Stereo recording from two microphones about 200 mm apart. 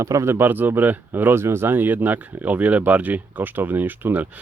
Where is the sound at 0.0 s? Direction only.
15° right (ahead or behind).